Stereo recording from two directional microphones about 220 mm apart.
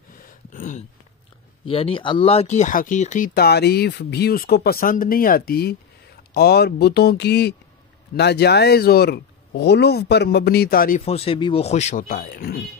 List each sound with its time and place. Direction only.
0.5 s a sound: 35° left (ahead or behind)
1.7 s speech: 25° left (ahead or behind); by 11.0 s 40° left (ahead or behind)
11.1 s speech: 25° left (ahead or behind); by 12.6 s 40° left (ahead or behind)